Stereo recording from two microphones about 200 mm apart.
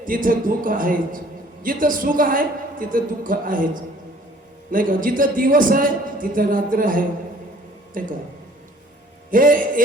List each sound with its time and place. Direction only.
0.0 s a man's voice: 45° right (ahead or behind)
4.7 s a man's voice: 45° right (ahead or behind)
9.3 s a man's voice: 45° right (ahead or behind)